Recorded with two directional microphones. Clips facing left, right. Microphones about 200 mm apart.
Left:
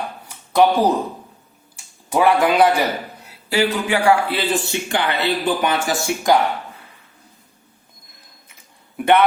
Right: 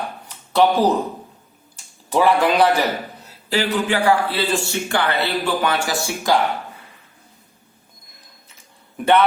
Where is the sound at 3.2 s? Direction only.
10° left (ahead or behind).